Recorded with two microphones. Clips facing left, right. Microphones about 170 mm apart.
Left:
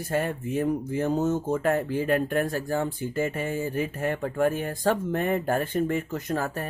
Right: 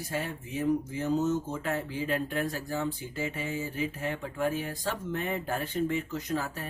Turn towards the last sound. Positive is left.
turn(degrees=50)  # may be behind; listen again after turning